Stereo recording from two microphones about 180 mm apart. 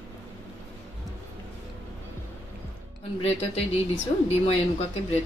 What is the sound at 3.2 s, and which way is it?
Speech, 35° left (ahead or behind).